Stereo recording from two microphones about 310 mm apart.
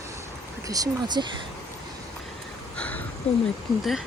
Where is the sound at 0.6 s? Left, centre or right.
Centre.